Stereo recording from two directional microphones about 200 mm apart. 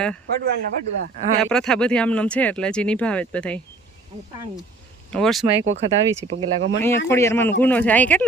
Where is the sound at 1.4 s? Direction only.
Centre (ahead or behind).